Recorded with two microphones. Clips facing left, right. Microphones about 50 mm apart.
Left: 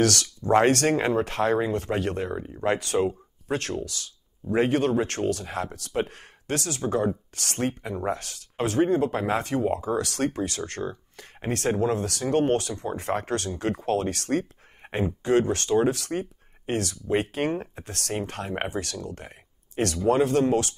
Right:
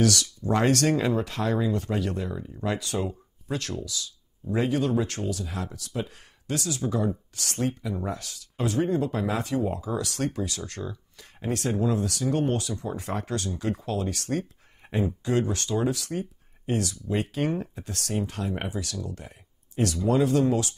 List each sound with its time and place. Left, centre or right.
0.0 s speech: left
0.5 s speech: left